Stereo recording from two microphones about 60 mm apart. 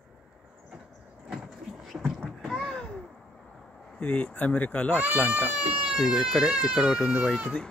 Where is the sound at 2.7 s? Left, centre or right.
Centre.